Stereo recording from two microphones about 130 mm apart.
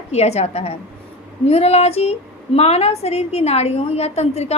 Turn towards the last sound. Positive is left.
turn(degrees=55)  # may be behind; listen again after turning